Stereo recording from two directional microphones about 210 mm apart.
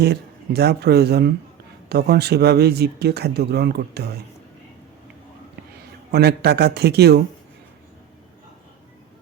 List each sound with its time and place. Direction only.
0.0 s speech: 50° right (ahead or behind)
6.1 s speech: 50° right (ahead or behind)